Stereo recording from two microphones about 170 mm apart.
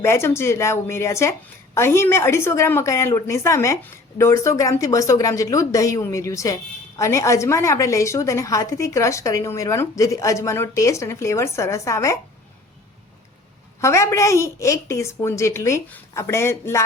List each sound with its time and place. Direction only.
0.0 s a woman's voice: 15° left (ahead or behind)
13.8 s a woman's voice: 15° left (ahead or behind)